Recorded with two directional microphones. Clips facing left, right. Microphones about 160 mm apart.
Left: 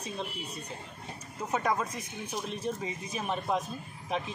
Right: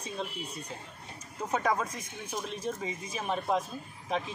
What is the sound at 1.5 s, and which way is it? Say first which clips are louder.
Speech: even; 5° left (ahead or behind).